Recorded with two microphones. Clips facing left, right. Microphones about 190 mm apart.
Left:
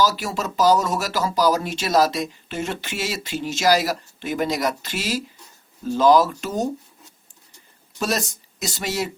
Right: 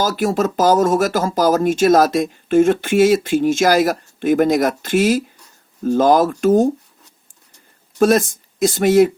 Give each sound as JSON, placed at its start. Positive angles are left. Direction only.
{"t": 0.0, "sound": "speech", "side_deg": -50}
{"t": 7.9, "sound": "speech", "side_deg": -50}